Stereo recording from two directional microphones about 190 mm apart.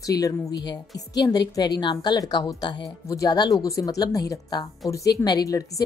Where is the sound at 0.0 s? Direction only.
20° left (ahead or behind).